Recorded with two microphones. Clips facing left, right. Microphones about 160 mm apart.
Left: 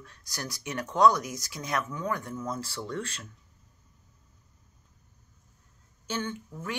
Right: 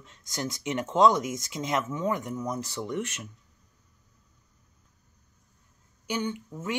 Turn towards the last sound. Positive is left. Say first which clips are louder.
# right 4 dB
turn(degrees=-20)  # may be behind; listen again after turning